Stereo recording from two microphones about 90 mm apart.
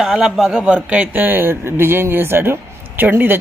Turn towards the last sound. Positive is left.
turn(degrees=-25)  # may be behind; listen again after turning